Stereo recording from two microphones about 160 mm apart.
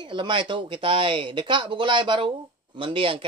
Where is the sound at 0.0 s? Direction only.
30° right (ahead or behind).